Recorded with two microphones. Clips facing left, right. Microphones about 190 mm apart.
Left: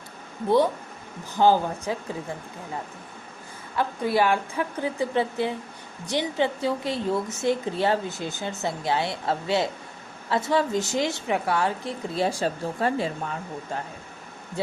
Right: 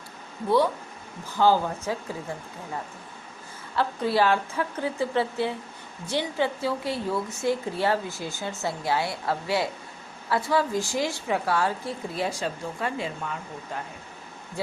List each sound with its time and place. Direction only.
0.4 s speech: 20° left (ahead or behind)
3.8 s a woman's voice: 15° left (ahead or behind); by 13.3 s 35° left (ahead or behind)